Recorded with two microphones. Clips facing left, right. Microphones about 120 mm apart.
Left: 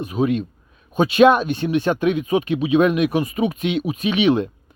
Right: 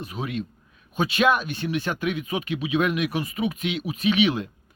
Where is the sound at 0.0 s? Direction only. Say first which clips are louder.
Left 10 dB; 20° left (ahead or behind).